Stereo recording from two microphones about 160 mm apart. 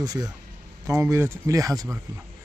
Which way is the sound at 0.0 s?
25° right (ahead or behind).